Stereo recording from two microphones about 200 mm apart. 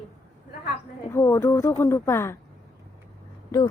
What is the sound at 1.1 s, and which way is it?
Speech, 15° left (ahead or behind).